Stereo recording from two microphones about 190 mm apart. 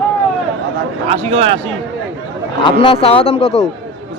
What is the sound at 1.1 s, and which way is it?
Speech, 35° right (ahead or behind).